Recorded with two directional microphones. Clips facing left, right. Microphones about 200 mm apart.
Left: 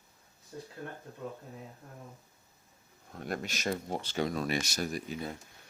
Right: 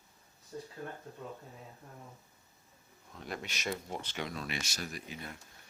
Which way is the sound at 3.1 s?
50° left (ahead or behind).